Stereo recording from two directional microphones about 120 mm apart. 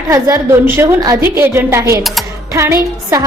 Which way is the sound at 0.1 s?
20° right (ahead or behind).